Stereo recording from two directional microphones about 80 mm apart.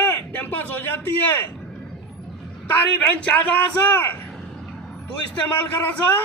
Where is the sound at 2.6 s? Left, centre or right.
Left.